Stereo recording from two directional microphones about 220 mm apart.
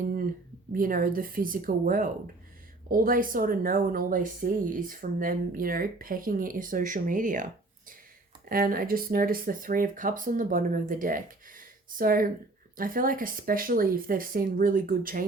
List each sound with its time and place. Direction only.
0.7 s speech: 40° right (ahead or behind)
8.4 s speech: 40° right (ahead or behind)